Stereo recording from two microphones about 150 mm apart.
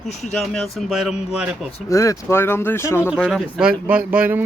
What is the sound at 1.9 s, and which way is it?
Speech, 20° left (ahead or behind).